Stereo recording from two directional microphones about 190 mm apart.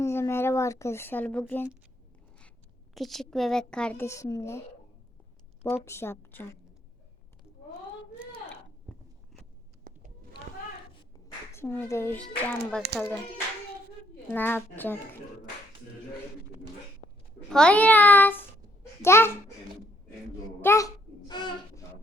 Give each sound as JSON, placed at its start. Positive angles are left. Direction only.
{"t": 0.0, "sound": "speech", "side_deg": 15}
{"t": 2.9, "sound": "a woman's voice", "side_deg": 0}
{"t": 5.6, "sound": "speech", "side_deg": 15}
{"t": 9.9, "sound": "a sound", "side_deg": -50}
{"t": 11.5, "sound": "a woman's voice", "side_deg": 10}
{"t": 14.3, "sound": "speech", "side_deg": 10}
{"t": 17.5, "sound": "a child's voice", "side_deg": 5}
{"t": 20.6, "sound": "babbling", "side_deg": 15}